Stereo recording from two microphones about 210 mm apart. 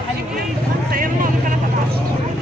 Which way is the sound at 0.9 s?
40° right (ahead or behind).